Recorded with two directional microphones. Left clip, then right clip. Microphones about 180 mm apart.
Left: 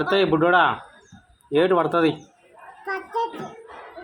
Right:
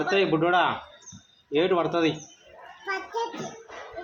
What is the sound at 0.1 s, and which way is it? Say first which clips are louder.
Speech: left 4 dB; 45° left (ahead or behind).